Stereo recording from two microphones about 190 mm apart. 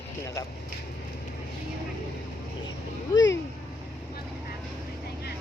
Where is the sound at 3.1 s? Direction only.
20° left (ahead or behind).